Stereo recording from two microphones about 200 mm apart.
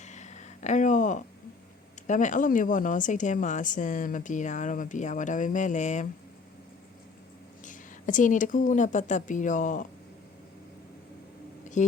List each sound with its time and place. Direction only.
0.0 s a sound: 35° left (ahead or behind)
2.0 s speech: 40° left (ahead or behind)
7.6 s speech: 40° left (ahead or behind)
11.8 s speech: 40° left (ahead or behind)